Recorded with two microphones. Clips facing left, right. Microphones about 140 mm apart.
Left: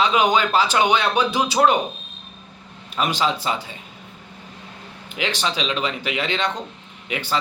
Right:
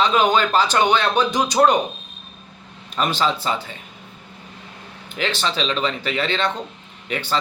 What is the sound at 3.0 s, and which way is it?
Speech, 10° left (ahead or behind).